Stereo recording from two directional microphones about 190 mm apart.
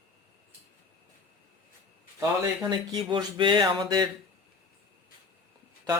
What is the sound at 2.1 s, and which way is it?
Speech, 20° right (ahead or behind).